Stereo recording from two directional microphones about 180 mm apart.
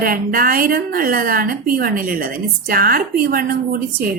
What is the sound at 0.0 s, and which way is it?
A woman's voice, 50° right (ahead or behind).